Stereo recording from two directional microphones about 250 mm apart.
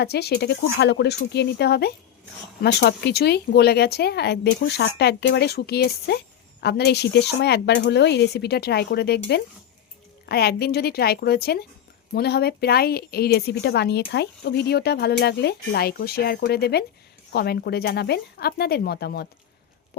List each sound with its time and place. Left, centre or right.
0.0 s a woman's voice: left